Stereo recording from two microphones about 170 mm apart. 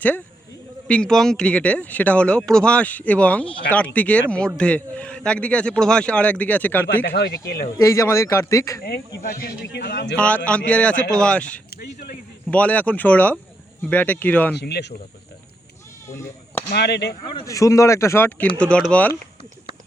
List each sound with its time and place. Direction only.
0.9 s speech: 5° left (ahead or behind)
6.8 s speech: 85° left
7.8 s speech: 15° left (ahead or behind)
8.8 s speech: 60° left (ahead or behind)
10.2 s speech: 5° left (ahead or behind)
11.8 s speech: 60° left (ahead or behind)
12.5 s speech: 10° left (ahead or behind)
14.5 s speech: 80° left
16.1 s speech: 15° left (ahead or behind)
16.7 s speech: 75° left (ahead or behind)
17.4 s speech: 20° left (ahead or behind)